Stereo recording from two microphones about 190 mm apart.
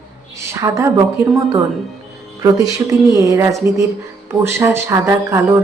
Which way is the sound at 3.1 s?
15° right (ahead or behind).